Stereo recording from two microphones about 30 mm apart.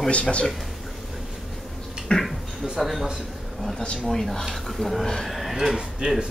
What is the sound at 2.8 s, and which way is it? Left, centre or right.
Speech, centre.